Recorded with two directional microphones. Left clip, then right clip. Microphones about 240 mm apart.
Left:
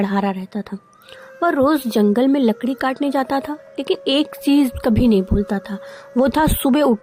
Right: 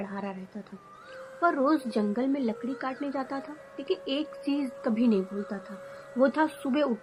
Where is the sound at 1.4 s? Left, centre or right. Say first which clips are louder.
Left 9 dB; left.